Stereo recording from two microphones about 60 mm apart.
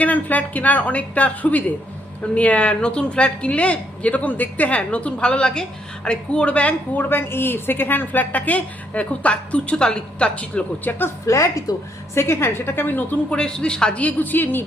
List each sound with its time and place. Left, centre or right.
0.0 s a woman's voice: left
10.9 s a woman's voice: left
11.3 s a woman's voice: left
12.1 s a woman's voice: left
13.3 s a woman's voice: centre; by 14.6 s left